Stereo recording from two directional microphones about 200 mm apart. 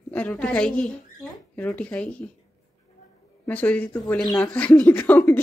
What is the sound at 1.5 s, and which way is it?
Speech, 5° left (ahead or behind).